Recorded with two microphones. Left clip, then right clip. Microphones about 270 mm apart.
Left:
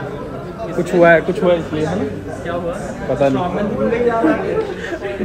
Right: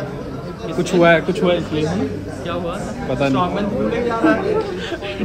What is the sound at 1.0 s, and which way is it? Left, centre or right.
Speech, centre.